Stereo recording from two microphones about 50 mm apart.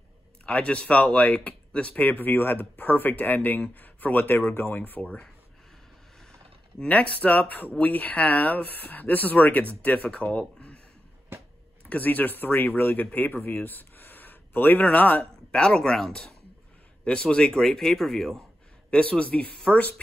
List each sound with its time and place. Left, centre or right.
0.5 s speech: left
2.0 s speech: left
6.8 s speech: left
11.3 s a sound: right
11.8 s speech: left
15.5 s a man's voice: centre
18.9 s speech: left